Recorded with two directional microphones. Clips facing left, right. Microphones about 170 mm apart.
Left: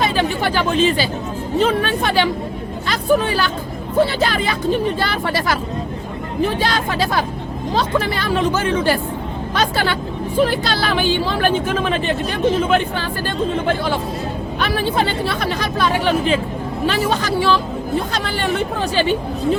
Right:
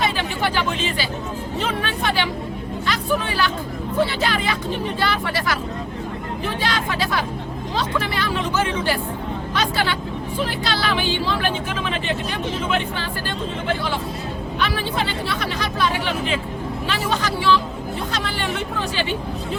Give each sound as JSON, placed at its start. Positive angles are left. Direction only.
{"t": 0.0, "sound": "chatter", "side_deg": 40}
{"t": 1.5, "sound": "speech", "side_deg": 40}
{"t": 6.6, "sound": "speech", "side_deg": 40}